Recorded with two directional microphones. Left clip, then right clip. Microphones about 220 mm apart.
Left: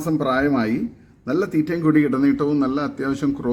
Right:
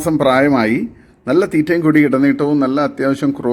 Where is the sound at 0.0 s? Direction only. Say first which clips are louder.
Right 8 dB; 15° right (ahead or behind).